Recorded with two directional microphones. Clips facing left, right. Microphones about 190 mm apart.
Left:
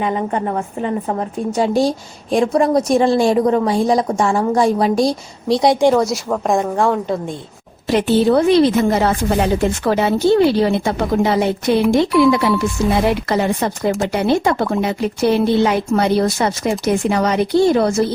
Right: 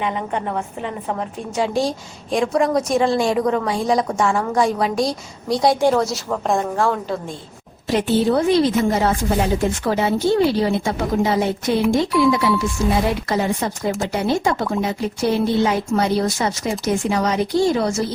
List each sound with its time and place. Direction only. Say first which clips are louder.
0.0 s a woman's voice: left 4 dB; 40° left (ahead or behind)
5.5 s speech: left 3 dB; 20° left (ahead or behind)
5.9 s speech: left 3 dB; centre (ahead or behind)
7.9 s speech: left 4 dB; 70° left (ahead or behind)